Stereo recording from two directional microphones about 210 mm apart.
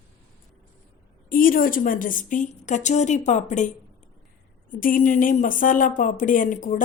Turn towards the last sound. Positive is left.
turn(degrees=40)  # may be behind; listen again after turning